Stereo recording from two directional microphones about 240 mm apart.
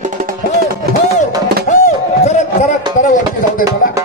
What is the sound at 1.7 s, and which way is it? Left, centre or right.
Music, left.